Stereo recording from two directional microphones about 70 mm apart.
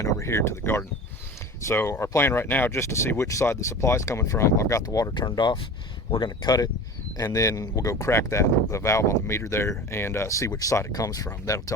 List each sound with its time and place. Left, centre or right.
0.0 s speech: left
7.2 s speech: left